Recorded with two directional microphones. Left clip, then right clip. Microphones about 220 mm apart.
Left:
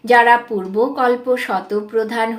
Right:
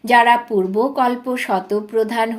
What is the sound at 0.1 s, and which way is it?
Speech, 40° right (ahead or behind).